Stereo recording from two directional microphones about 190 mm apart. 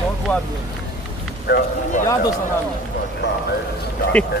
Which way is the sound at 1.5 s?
55° left (ahead or behind).